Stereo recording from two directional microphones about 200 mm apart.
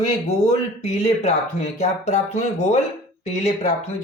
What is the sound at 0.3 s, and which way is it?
Speech, 35° left (ahead or behind).